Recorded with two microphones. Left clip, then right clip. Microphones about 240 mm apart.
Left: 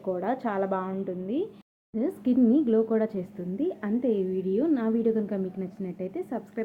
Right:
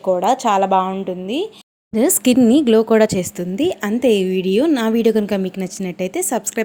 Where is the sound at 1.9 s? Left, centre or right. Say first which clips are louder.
Right 13 dB; right.